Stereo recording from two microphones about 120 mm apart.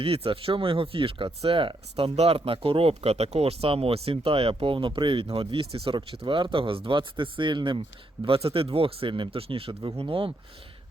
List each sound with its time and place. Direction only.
0.0 s speech: 50° right (ahead or behind)